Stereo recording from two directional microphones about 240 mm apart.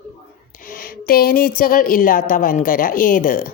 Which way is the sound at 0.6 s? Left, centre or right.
Left.